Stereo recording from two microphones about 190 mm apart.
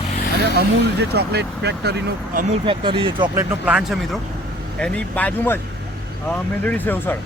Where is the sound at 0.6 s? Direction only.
60° right (ahead or behind).